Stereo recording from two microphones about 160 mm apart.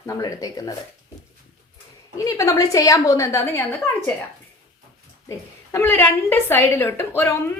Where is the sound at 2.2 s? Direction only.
20° left (ahead or behind).